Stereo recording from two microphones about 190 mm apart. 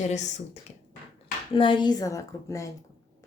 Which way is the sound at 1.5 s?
25° left (ahead or behind).